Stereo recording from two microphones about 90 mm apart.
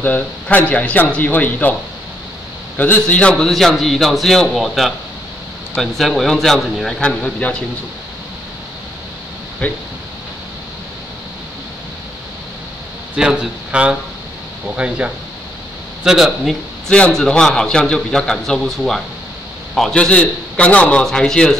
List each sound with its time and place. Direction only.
0.0 s speech: 20° left (ahead or behind)
2.8 s a man's voice: 15° left (ahead or behind)
9.6 s a man's voice: 15° left (ahead or behind)
13.1 s a man's voice: 10° right (ahead or behind)
16.9 s a man's voice: 10° left (ahead or behind)